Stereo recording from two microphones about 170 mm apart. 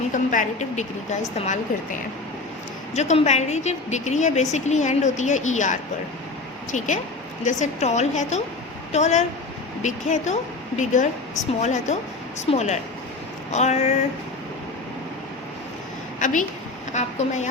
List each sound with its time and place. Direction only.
0.1 s a woman's voice: 50° left (ahead or behind)
12.5 s a sound: 40° left (ahead or behind)
16.2 s a woman's voice: 50° left (ahead or behind)